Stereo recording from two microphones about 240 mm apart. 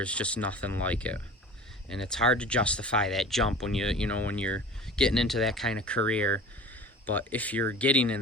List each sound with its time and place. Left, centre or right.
0.0 s speech: centre